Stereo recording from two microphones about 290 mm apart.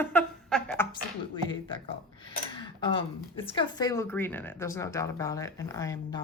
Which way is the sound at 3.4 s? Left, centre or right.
Centre.